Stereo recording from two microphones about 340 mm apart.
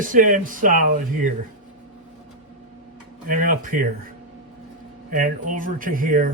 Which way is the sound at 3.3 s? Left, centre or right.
Right.